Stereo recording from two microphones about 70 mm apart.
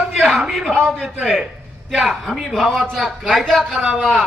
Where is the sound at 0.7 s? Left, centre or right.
Centre.